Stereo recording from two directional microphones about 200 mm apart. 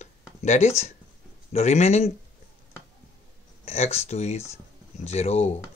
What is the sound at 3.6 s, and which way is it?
Speech, 30° left (ahead or behind).